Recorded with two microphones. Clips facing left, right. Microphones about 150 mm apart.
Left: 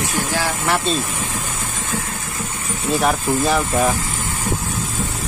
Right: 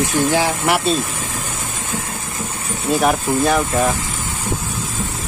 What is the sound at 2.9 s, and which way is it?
Speech, centre (ahead or behind).